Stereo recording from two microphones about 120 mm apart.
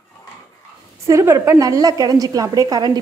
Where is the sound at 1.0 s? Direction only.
25° right (ahead or behind).